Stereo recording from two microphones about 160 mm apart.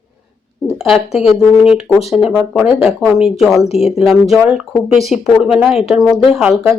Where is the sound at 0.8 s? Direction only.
Centre (ahead or behind).